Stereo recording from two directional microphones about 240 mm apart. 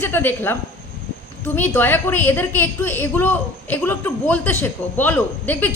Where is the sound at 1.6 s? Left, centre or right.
Centre.